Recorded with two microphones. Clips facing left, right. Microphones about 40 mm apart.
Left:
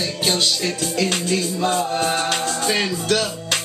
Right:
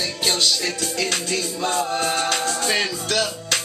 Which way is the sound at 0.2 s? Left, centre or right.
Centre.